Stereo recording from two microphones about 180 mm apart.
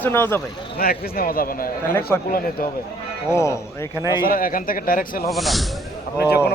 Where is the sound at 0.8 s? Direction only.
55° left (ahead or behind).